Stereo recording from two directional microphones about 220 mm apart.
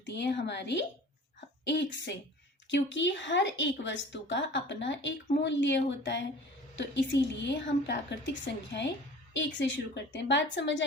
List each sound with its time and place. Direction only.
0.0 s a woman's voice: 55° left (ahead or behind)